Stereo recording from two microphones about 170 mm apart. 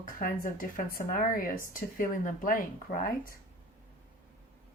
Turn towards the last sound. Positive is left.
turn(degrees=55)  # may be behind; listen again after turning